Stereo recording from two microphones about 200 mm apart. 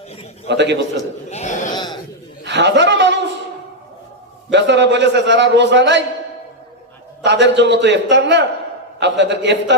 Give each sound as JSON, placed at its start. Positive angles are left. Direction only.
{"t": 0.4, "sound": "a man's voice", "side_deg": -60}
{"t": 1.3, "sound": "speech", "side_deg": 35}
{"t": 1.7, "sound": "a sound", "side_deg": 20}
{"t": 2.4, "sound": "chuckle", "side_deg": -60}
{"t": 4.5, "sound": "a man's voice", "side_deg": -60}
{"t": 7.3, "sound": "a man's voice", "side_deg": -60}